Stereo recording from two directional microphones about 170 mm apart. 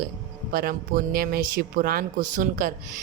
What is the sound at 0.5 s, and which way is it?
Speech, 60° right (ahead or behind).